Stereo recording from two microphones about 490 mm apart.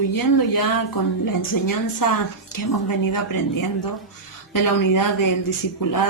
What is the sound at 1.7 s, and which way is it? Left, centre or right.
A woman's voice, left.